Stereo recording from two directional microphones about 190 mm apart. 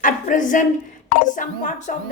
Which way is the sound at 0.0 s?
45° left (ahead or behind).